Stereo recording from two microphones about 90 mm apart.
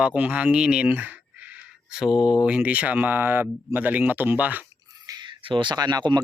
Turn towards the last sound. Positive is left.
turn(degrees=-55)  # may be behind; listen again after turning